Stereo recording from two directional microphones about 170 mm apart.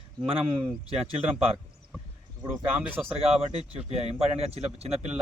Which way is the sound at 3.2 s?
35° right (ahead or behind).